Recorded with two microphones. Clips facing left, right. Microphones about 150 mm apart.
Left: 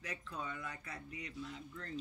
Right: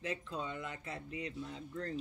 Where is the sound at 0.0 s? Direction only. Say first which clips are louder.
Right 5 dB; 25° right (ahead or behind).